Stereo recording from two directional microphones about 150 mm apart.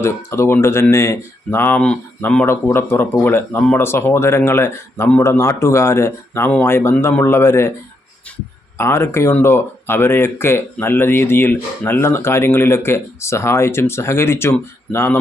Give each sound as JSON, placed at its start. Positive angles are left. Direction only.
{"t": 0.0, "sound": "speech", "side_deg": 20}
{"t": 8.8, "sound": "speech", "side_deg": 15}